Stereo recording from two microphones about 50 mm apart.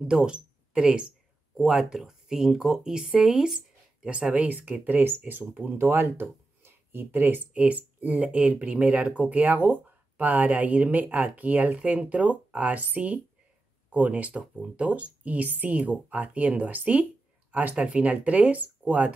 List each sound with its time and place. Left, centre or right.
0.1 s speech: centre
4.8 s speech: right
6.6 s a sound: right
7.5 s speech: right
17.7 s speech: right